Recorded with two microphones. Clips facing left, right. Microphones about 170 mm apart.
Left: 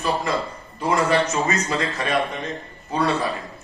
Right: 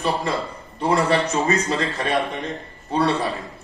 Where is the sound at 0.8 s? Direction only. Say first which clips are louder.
Right 1 dB; 30° right (ahead or behind).